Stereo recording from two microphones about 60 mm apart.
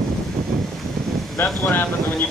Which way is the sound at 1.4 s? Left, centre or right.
Left.